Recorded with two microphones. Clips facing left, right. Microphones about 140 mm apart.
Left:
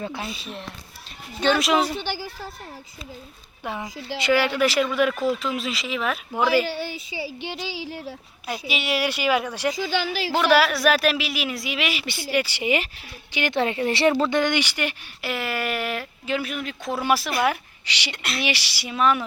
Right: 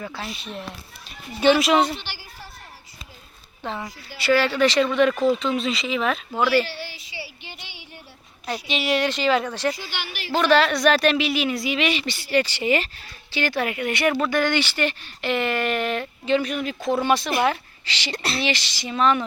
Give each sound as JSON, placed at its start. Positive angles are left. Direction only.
{"t": 0.0, "sound": "speech", "side_deg": 20}
{"t": 1.4, "sound": "a woman's voice", "side_deg": -5}
{"t": 3.6, "sound": "a woman's voice", "side_deg": 15}
{"t": 7.4, "sound": "a sound", "side_deg": 85}
{"t": 8.4, "sound": "a woman's voice", "side_deg": 5}
{"t": 18.1, "sound": "speech", "side_deg": -35}
{"t": 18.4, "sound": "speech", "side_deg": 10}